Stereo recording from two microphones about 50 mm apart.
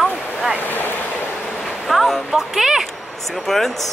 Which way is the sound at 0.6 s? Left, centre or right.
Left.